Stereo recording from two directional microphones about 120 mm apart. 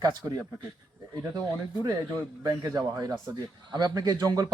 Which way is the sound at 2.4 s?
30° right (ahead or behind).